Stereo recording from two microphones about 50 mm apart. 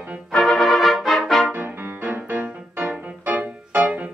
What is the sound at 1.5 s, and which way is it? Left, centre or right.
Music, right.